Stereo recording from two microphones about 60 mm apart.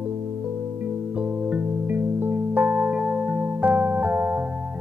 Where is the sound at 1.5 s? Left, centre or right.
Right.